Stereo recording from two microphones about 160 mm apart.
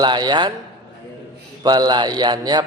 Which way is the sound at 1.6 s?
25° right (ahead or behind).